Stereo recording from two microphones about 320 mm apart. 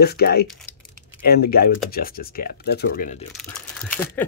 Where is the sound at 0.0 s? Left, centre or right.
Left.